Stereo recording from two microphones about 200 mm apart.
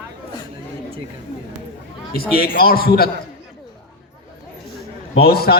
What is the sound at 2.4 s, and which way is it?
Speech, 50° left (ahead or behind).